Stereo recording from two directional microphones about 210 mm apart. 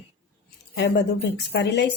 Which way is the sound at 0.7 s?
55° left (ahead or behind).